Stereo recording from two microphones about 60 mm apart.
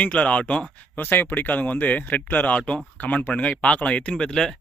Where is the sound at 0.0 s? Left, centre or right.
Left.